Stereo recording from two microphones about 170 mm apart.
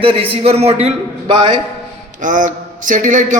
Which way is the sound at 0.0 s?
35° right (ahead or behind).